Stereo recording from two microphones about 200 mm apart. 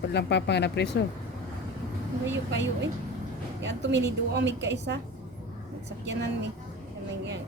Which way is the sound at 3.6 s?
60° right (ahead or behind).